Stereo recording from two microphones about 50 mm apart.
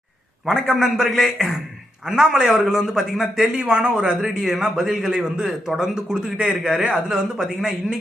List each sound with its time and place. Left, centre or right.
0.4 s a man's voice: centre
3.6 s a man's voice: right
6.6 s a man's voice: centre